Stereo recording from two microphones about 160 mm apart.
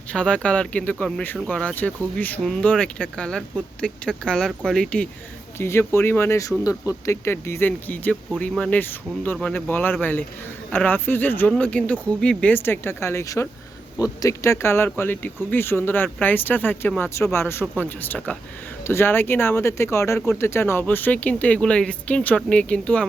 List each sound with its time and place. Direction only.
0.1 s speech: 5° left (ahead or behind)
5.5 s speech: 15° left (ahead or behind)